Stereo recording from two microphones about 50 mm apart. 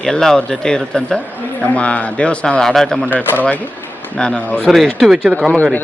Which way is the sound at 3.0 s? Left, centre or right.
Left.